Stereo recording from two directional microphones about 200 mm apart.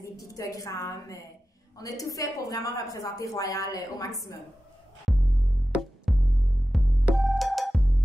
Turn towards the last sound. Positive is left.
turn(degrees=0)  # may be behind; listen again after turning